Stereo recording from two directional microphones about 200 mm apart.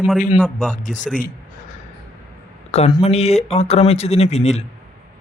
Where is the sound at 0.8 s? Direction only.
40° left (ahead or behind).